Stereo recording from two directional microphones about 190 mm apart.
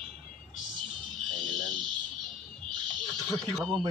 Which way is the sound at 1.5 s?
Centre (ahead or behind).